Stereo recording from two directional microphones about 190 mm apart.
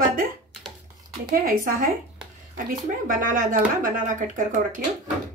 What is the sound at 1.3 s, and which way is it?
Speech, 50° right (ahead or behind).